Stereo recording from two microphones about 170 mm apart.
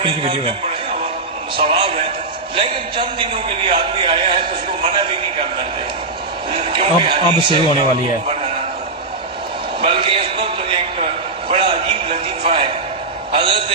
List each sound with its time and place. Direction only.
1.5 s a man's voice: 30° right (ahead or behind)
6.5 s a man's voice: 30° right (ahead or behind)
9.8 s a man's voice: 30° right (ahead or behind)
11.4 s a man's voice: 30° right (ahead or behind)